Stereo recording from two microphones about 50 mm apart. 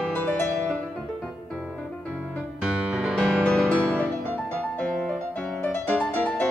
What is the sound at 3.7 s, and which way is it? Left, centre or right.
Music, left.